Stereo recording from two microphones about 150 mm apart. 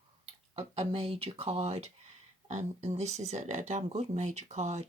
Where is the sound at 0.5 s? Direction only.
45° right (ahead or behind).